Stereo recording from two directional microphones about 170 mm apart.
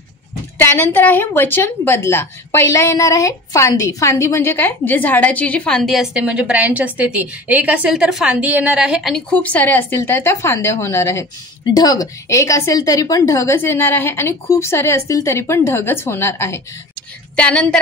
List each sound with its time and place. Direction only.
0.6 s a woman's voice: 10° left (ahead or behind)